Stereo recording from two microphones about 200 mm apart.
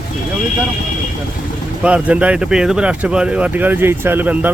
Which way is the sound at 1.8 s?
5° right (ahead or behind).